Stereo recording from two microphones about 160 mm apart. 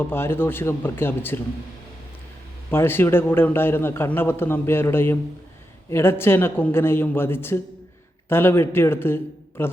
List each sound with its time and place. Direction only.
0.0 s a man's voice: 15° left (ahead or behind)
2.6 s a man's voice: 15° left (ahead or behind)